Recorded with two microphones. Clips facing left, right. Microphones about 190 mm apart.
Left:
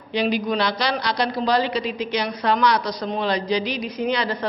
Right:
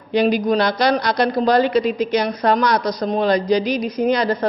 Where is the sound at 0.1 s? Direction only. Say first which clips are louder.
Right 6 dB; 45° right (ahead or behind).